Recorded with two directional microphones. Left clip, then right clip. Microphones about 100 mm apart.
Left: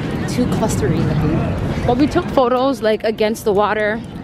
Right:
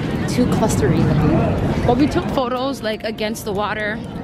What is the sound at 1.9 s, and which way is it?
Speech, 15° left (ahead or behind).